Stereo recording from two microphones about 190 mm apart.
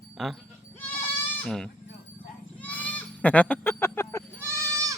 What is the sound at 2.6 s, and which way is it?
Bleat, 10° left (ahead or behind).